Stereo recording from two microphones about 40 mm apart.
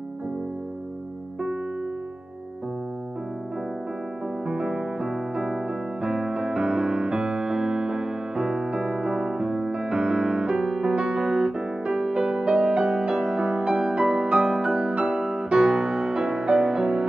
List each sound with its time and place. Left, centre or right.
4.5 s piano: centre
6.0 s music: centre